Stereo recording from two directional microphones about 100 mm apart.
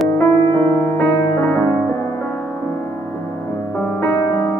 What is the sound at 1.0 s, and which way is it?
Music, 20° left (ahead or behind).